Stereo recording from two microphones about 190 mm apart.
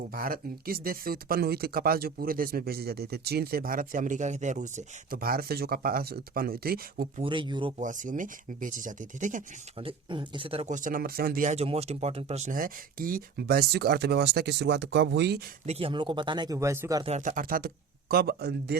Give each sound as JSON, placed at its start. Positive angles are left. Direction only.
{"t": 0.1, "sound": "speech", "side_deg": -50}
{"t": 7.2, "sound": "speech", "side_deg": -25}
{"t": 7.8, "sound": "speech", "side_deg": -40}
{"t": 9.7, "sound": "speech", "side_deg": -25}
{"t": 15.6, "sound": "speech", "side_deg": -30}
{"t": 17.2, "sound": "speech", "side_deg": -45}